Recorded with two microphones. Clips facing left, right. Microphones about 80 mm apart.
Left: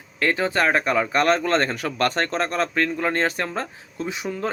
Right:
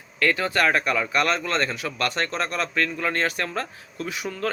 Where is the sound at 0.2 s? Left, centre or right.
Left.